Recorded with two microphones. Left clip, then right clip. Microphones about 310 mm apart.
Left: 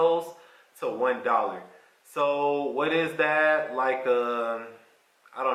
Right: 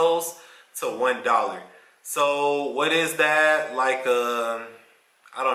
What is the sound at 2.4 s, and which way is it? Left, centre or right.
Mantra, left.